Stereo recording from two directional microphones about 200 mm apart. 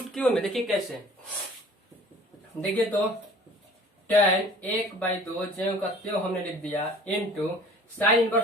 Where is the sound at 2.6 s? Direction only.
5° left (ahead or behind).